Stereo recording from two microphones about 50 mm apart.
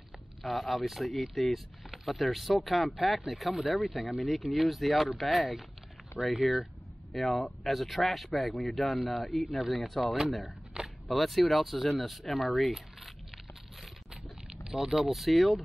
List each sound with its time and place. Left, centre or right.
0.4 s speech: centre
10.8 s biting: right
11.1 s speech: centre
14.7 s speech: centre